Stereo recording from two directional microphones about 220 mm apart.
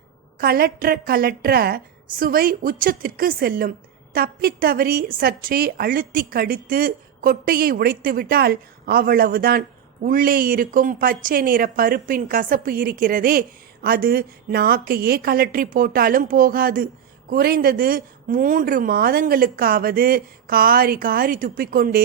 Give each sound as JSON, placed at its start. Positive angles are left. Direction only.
{"t": 0.3, "sound": "a woman's voice", "side_deg": -45}